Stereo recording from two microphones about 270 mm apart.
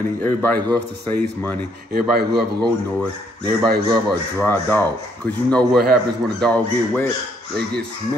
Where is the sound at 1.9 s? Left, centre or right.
Right.